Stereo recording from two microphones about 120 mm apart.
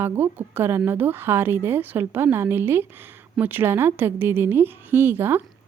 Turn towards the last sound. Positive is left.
turn(degrees=-20)  # may be behind; listen again after turning